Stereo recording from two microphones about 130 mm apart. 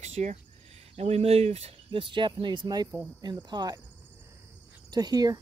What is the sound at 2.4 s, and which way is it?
Speech, 35° right (ahead or behind).